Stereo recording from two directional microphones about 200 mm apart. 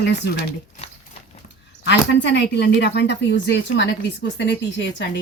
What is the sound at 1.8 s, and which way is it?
Speech, 60° left (ahead or behind).